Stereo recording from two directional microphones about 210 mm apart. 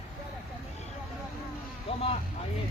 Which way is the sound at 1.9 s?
30° left (ahead or behind).